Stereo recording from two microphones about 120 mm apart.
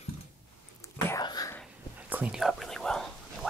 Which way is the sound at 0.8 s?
25° left (ahead or behind).